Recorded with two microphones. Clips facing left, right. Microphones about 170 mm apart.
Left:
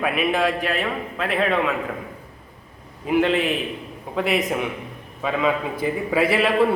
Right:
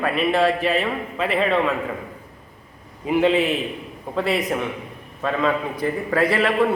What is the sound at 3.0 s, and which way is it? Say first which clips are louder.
A man's voice: right 1 dB; centre (ahead or behind).